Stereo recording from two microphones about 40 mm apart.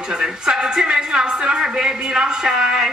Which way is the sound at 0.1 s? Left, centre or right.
Right.